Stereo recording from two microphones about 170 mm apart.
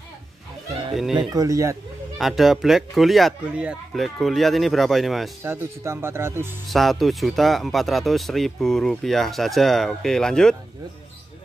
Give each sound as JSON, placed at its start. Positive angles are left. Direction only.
{"t": 1.3, "sound": "speech", "side_deg": -20}
{"t": 2.1, "sound": "speech", "side_deg": 0}
{"t": 5.4, "sound": "speech", "side_deg": -15}
{"t": 6.7, "sound": "speech", "side_deg": 0}